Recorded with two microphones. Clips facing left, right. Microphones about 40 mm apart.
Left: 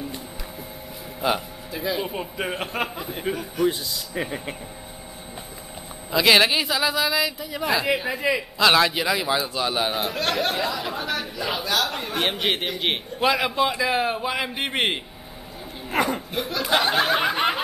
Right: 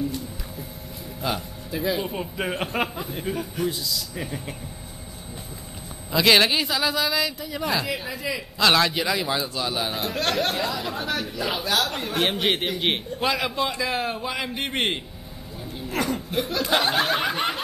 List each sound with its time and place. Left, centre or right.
1.2 s a man's voice: centre
1.7 s speech: centre
3.6 s a man's voice: left
6.1 s speech: centre
7.8 s a man's voice: left
8.5 s a man's voice: centre
10.1 s speech: centre; by 16.2 s left
16.3 s speech: centre